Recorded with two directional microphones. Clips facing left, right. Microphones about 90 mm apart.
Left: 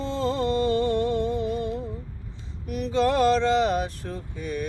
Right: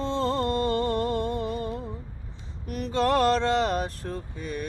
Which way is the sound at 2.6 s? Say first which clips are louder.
Left 2 dB; 45° right (ahead or behind).